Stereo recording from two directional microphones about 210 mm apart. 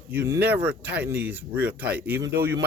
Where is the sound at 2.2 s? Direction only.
55° right (ahead or behind).